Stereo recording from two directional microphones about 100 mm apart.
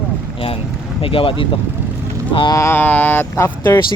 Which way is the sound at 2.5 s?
30° left (ahead or behind).